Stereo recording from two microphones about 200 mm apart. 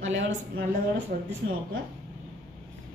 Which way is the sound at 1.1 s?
45° right (ahead or behind).